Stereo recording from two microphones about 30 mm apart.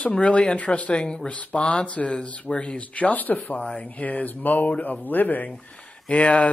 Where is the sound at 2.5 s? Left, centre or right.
Left.